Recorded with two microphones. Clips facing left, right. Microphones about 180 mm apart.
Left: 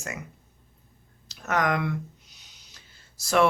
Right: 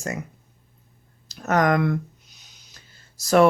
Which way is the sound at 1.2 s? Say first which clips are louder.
Right 6 dB; 40° right (ahead or behind).